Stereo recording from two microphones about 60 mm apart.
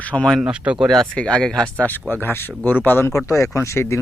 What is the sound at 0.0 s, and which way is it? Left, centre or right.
Speech, left.